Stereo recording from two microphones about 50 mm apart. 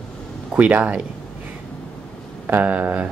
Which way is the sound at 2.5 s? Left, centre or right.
Right.